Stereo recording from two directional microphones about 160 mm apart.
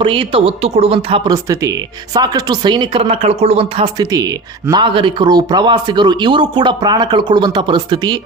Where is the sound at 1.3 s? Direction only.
20° right (ahead or behind).